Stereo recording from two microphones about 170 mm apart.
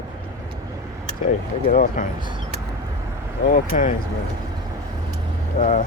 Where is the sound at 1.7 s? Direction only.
55° left (ahead or behind).